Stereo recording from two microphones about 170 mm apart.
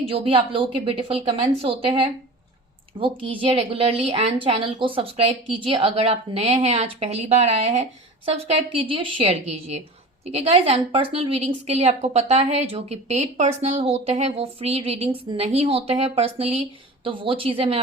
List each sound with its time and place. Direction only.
0.1 s a woman's voice: 30° right (ahead or behind)